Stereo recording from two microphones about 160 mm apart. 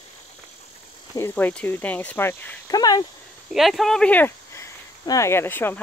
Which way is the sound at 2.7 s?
25° left (ahead or behind).